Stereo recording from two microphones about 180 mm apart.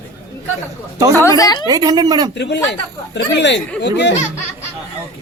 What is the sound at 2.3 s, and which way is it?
Speech, 75° left (ahead or behind).